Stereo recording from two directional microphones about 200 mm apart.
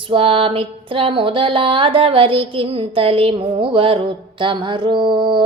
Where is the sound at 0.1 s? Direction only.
25° right (ahead or behind).